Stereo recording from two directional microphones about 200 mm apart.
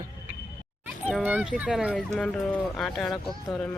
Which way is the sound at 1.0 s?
10° right (ahead or behind).